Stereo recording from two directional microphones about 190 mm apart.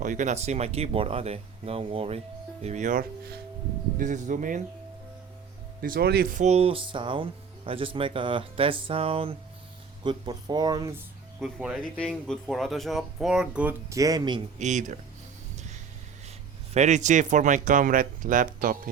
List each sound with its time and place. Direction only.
0.0 s speech: 40° right (ahead or behind)
3.9 s speech: 40° right (ahead or behind)
5.8 s speech: 50° right (ahead or behind); by 10.9 s 20° right (ahead or behind)
11.3 s speech: centre (ahead or behind); by 14.4 s 20° right (ahead or behind)
14.6 s speech: 40° right (ahead or behind)
16.7 s speech: 40° right (ahead or behind)